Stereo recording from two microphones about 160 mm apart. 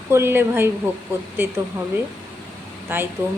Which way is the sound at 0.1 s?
15° right (ahead or behind).